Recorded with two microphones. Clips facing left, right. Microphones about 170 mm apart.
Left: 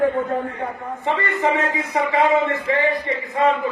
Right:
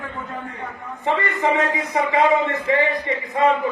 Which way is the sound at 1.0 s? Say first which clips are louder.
Even; 20° right (ahead or behind).